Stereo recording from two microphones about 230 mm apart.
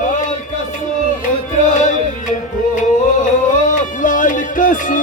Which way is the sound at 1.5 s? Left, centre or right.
Left.